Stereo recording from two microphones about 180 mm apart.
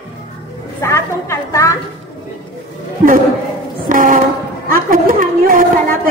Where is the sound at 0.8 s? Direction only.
15° left (ahead or behind).